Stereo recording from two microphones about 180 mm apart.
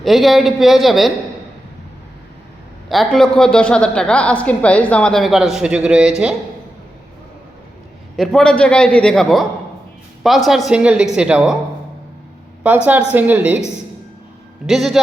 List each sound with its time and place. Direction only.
0.0 s a woman's voice: centre (ahead or behind)
2.9 s a woman's voice: centre (ahead or behind)
8.1 s a woman's voice: 5° left (ahead or behind)
12.6 s a woman's voice: 10° right (ahead or behind)
14.7 s a woman's voice: centre (ahead or behind)